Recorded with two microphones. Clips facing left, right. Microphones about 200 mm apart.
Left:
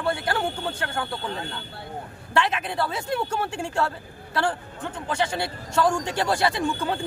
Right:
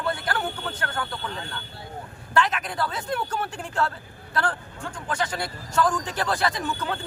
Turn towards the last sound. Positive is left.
turn(degrees=30)  # may be behind; listen again after turning